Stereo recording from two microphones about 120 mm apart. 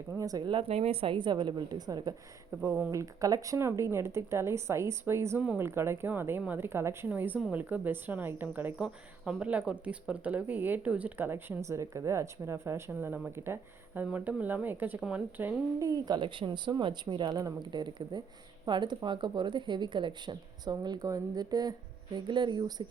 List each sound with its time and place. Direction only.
0.2 s speech: 30° right (ahead or behind)
0.5 s speech: 55° right (ahead or behind); by 2.1 s 35° right (ahead or behind)
2.6 s speech: 20° right (ahead or behind)
15.8 s speech: 30° right (ahead or behind)